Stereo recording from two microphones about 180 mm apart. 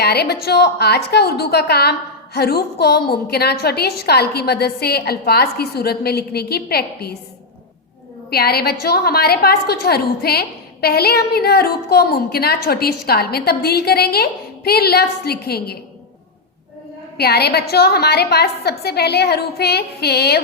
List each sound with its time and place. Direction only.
0.0 s a woman's voice: 65° left (ahead or behind)
8.3 s a woman's voice: 60° left (ahead or behind)
17.2 s a woman's voice: 65° left (ahead or behind)